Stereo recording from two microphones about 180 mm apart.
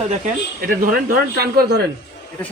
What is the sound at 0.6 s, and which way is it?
A man's voice, 55° right (ahead or behind).